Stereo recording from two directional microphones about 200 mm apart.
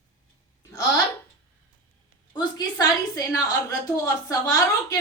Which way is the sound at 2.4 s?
20° left (ahead or behind).